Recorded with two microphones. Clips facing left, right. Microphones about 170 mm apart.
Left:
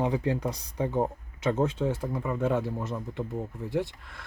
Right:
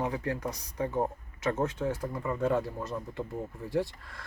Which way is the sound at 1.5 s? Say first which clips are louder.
Left 3 dB; 15° left (ahead or behind).